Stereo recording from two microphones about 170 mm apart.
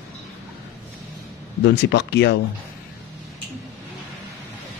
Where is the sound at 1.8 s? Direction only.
90° left.